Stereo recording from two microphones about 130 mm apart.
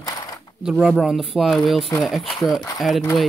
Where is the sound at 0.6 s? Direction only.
5° right (ahead or behind).